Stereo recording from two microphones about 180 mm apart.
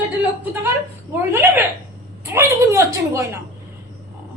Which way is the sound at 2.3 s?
15° right (ahead or behind).